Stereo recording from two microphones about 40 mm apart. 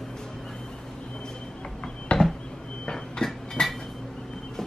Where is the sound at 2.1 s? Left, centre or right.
Left.